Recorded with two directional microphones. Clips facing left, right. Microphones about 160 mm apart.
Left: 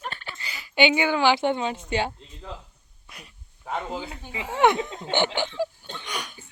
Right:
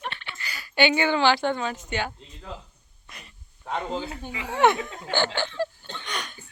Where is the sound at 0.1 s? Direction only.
40° left (ahead or behind).